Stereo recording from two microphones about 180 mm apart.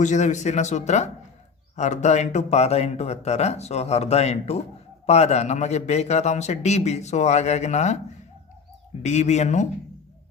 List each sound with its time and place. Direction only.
0.0 s a man's voice: 40° left (ahead or behind)